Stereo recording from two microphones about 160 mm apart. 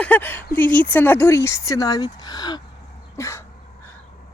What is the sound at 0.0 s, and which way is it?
Speech, 10° left (ahead or behind).